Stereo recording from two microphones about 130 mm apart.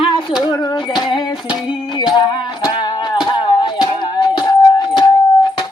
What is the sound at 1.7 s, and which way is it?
Music, 35° left (ahead or behind).